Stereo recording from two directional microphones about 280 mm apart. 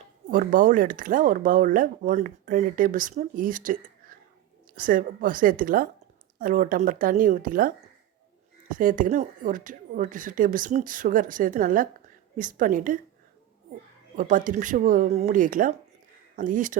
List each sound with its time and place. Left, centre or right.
0.3 s speech: right
8.7 s speech: right
14.2 s speech: right